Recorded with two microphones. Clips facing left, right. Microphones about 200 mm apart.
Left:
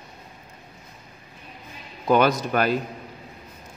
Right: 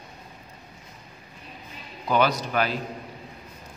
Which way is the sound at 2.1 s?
50° left (ahead or behind).